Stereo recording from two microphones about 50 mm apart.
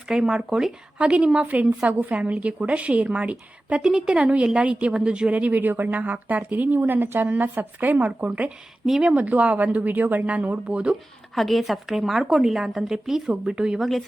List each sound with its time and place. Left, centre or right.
0.1 s a woman's voice: centre
1.9 s a woman's voice: right
3.8 s a woman's voice: centre
11.3 s a woman's voice: centre
13.7 s a woman's voice: centre